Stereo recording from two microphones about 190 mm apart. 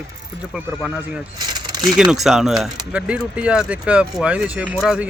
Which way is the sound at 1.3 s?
20° right (ahead or behind).